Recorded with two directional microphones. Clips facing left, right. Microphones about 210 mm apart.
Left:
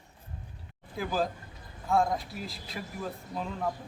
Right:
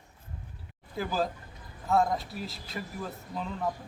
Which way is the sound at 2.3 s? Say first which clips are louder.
Right 1 dB; centre (ahead or behind).